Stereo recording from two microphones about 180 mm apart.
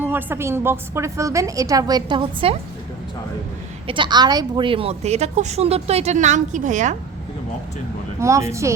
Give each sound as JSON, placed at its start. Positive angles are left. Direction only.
{"t": 0.0, "sound": "a woman's voice", "side_deg": -10}
{"t": 3.8, "sound": "a woman's voice", "side_deg": -25}
{"t": 8.2, "sound": "a woman's voice", "side_deg": -15}